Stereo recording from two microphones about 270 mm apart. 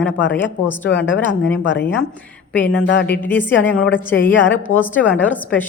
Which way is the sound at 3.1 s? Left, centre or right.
Centre.